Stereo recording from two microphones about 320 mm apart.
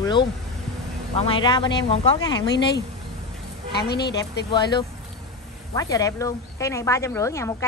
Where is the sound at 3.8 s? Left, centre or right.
Left.